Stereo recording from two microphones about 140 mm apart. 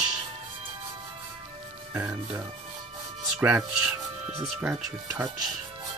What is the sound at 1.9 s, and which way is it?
Speech, 20° right (ahead or behind).